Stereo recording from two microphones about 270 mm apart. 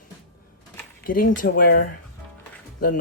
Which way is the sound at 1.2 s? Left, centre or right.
Left.